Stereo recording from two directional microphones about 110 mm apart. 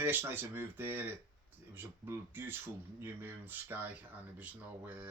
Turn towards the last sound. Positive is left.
turn(degrees=-15)  # may be behind; listen again after turning